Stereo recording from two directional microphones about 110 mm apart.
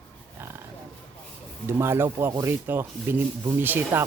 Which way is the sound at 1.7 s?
20° right (ahead or behind).